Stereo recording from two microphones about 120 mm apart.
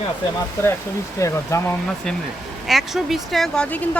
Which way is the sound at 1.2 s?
25° left (ahead or behind).